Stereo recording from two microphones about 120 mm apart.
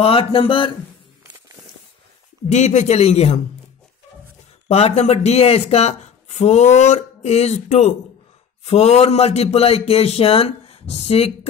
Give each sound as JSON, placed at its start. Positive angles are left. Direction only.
{"t": 0.0, "sound": "speech", "side_deg": 50}
{"t": 2.5, "sound": "speech", "side_deg": 75}
{"t": 4.6, "sound": "speech", "side_deg": 60}